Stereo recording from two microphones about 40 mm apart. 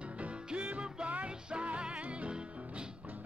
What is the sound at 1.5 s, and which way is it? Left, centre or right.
Music, right.